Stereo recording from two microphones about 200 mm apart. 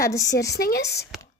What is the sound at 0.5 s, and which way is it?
Speech, 50° left (ahead or behind).